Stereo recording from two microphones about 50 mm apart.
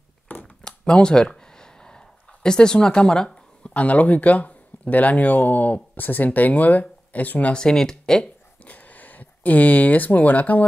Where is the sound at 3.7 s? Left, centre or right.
Left.